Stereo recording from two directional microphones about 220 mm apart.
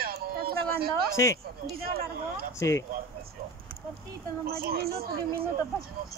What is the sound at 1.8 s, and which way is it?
Speech, 45° right (ahead or behind).